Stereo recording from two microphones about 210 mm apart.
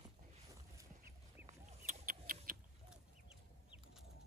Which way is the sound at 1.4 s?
35° right (ahead or behind).